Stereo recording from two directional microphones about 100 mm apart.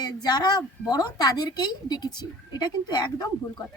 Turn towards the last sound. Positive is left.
turn(degrees=45)  # may be behind; listen again after turning